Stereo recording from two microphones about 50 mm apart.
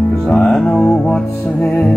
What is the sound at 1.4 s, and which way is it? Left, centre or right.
Music, left.